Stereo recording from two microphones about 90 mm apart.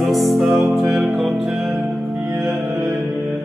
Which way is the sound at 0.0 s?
Centre (ahead or behind).